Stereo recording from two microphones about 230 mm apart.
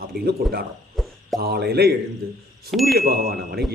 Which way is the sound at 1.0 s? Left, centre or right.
Centre.